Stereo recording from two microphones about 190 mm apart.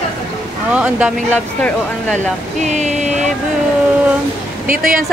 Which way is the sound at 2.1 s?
40° right (ahead or behind).